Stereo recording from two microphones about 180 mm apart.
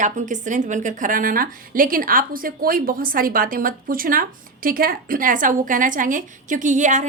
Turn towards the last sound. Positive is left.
turn(degrees=-40)  # may be behind; listen again after turning